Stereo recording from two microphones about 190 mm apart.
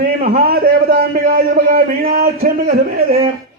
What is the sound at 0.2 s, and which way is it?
A man's voice, 50° right (ahead or behind).